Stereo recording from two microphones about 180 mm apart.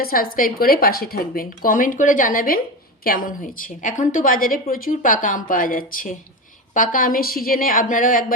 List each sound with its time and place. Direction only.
0.0 s a woman's voice: 55° left (ahead or behind)